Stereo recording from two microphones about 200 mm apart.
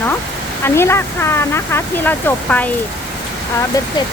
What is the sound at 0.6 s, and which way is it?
Speech, 10° left (ahead or behind).